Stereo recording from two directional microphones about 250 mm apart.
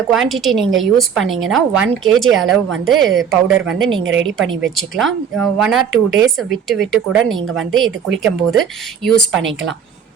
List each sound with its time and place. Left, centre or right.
0.1 s a woman's voice: centre
4.0 s a woman's voice: right
4.6 s a woman's voice: centre